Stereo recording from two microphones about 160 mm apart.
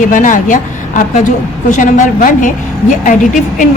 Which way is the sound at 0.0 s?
55° left (ahead or behind).